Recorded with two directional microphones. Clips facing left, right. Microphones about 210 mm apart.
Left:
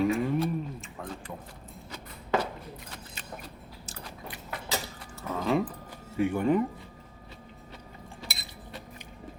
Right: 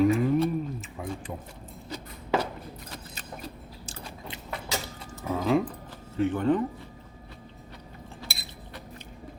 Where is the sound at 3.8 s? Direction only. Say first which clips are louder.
Right 2 dB; 30° right (ahead or behind).